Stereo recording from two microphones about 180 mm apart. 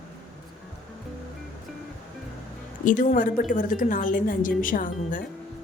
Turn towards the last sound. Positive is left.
turn(degrees=50)  # may be behind; listen again after turning